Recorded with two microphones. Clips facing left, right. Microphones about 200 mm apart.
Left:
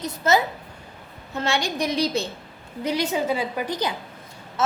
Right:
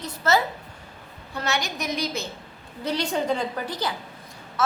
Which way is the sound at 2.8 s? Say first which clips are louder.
Left 1 dB; 10° left (ahead or behind).